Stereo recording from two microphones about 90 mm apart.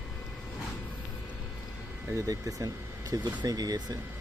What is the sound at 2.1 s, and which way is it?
Speech, 35° right (ahead or behind).